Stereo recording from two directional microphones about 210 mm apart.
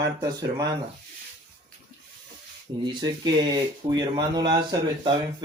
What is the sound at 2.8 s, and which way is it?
Speech, 20° right (ahead or behind).